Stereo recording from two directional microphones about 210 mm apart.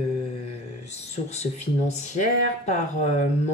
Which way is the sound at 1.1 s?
30° left (ahead or behind).